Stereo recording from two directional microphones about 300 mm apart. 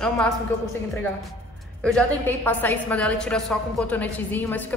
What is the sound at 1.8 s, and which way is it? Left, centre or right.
A woman's voice, centre.